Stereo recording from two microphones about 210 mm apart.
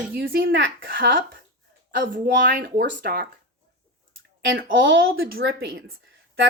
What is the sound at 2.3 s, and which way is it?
Speech, 55° right (ahead or behind).